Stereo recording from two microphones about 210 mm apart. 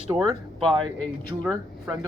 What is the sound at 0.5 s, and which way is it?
Speech, 5° left (ahead or behind).